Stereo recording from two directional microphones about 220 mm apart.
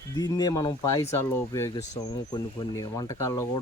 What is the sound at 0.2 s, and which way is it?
Speech, 15° left (ahead or behind).